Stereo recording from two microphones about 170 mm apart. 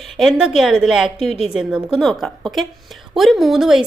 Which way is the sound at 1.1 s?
40° left (ahead or behind).